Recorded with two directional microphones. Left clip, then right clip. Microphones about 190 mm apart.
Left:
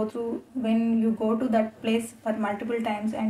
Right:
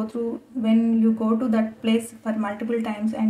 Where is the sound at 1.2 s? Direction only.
15° right (ahead or behind).